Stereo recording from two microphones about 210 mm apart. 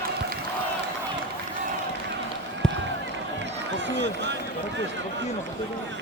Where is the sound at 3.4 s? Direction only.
55° right (ahead or behind).